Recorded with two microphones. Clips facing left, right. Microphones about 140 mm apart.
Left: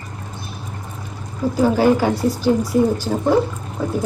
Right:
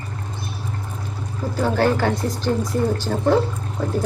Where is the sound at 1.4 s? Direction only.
10° left (ahead or behind).